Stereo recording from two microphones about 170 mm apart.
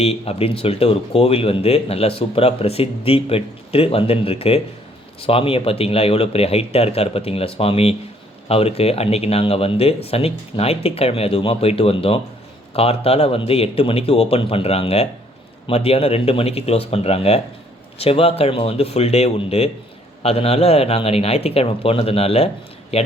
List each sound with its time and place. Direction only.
0.0 s speech: 35° left (ahead or behind)